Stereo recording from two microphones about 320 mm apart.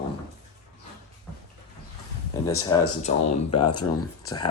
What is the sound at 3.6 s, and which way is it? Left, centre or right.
Speech, left.